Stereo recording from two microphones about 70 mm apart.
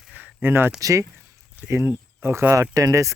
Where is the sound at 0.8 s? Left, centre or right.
Right.